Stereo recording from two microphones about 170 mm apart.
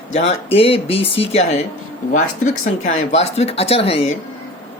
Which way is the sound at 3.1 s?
40° left (ahead or behind).